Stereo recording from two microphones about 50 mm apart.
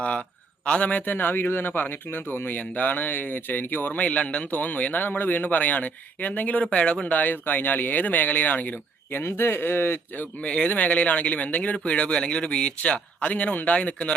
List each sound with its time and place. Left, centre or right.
0.6 s speech: left
2.6 s speech: left
3.9 s speech: left
4.5 s speech: left
6.7 s speech: left
9.4 s speech: left
10.4 s speech: left